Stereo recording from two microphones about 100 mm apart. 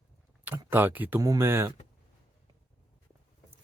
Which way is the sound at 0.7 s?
20° right (ahead or behind).